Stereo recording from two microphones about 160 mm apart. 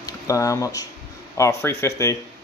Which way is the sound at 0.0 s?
20° left (ahead or behind).